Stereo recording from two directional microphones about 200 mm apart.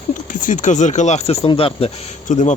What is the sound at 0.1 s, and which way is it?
Speech, 40° left (ahead or behind).